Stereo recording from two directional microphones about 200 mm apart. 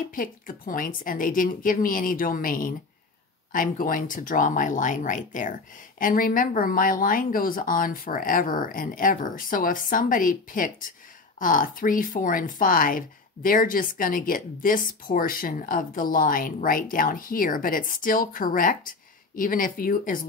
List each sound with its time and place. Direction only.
0.1 s speech: 45° left (ahead or behind)